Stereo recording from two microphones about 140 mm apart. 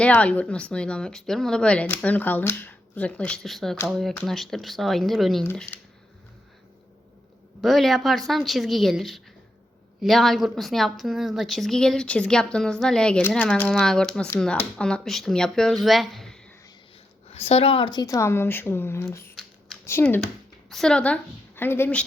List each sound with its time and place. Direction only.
0.0 s a woman's voice: 10° left (ahead or behind)
7.6 s a woman's voice: centre (ahead or behind)
17.3 s a woman's voice: 45° left (ahead or behind); by 20.2 s 15° left (ahead or behind)
20.2 s speech: centre (ahead or behind)